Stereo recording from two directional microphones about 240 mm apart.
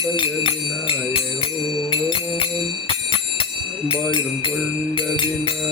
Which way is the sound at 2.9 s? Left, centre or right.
Left.